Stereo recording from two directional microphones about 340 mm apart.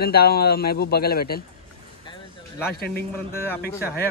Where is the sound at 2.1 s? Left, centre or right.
Centre.